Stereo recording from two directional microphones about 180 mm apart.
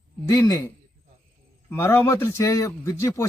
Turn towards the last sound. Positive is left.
turn(degrees=15)  # may be behind; listen again after turning